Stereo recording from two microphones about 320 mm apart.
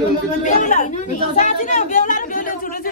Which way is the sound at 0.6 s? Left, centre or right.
Left.